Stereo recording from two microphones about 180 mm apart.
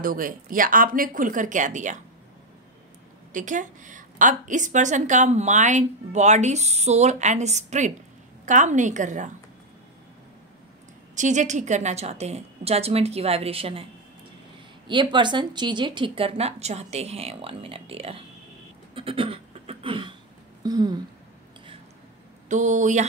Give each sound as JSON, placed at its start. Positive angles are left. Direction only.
{"t": 0.0, "sound": "speech", "side_deg": -50}
{"t": 3.3, "sound": "a woman's voice", "side_deg": -45}
{"t": 11.1, "sound": "a woman's voice", "side_deg": -40}
{"t": 14.9, "sound": "a woman's voice", "side_deg": -25}
{"t": 18.9, "sound": "a sound", "side_deg": -30}
{"t": 22.5, "sound": "speech", "side_deg": -45}